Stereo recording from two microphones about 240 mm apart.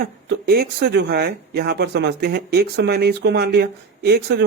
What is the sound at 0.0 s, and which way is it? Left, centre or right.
Speech, right.